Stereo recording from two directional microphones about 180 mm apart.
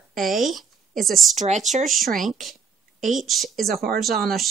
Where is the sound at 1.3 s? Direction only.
40° right (ahead or behind).